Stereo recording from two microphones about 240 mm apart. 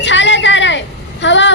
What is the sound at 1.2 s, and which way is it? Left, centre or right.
Vehicle, left.